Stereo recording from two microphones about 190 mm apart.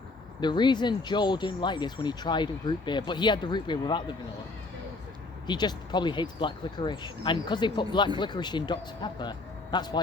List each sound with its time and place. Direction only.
0.4 s speech: 25° left (ahead or behind)
5.5 s speech: 25° left (ahead or behind)